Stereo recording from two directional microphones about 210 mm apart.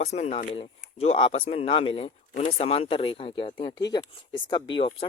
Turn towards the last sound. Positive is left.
turn(degrees=25)  # may be behind; listen again after turning